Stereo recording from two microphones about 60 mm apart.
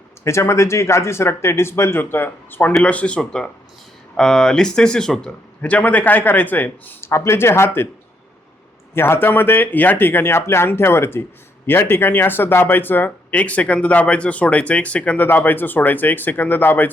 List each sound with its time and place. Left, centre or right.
0.3 s speech: left
2.8 s speech: left
5.6 s speech: left
7.0 s speech: left
9.0 s speech: left
15.3 s speech: left